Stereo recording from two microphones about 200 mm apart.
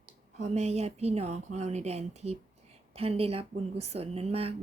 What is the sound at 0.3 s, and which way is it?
A woman's voice, 35° right (ahead or behind).